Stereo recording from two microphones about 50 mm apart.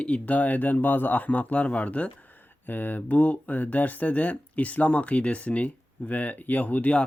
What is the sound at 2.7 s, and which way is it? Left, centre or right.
Speech, left.